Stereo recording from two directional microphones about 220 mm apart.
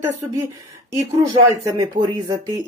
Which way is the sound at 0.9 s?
15° right (ahead or behind).